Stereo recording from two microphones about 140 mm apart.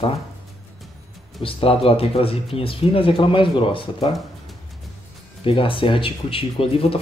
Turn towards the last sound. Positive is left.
turn(degrees=40)  # may be behind; listen again after turning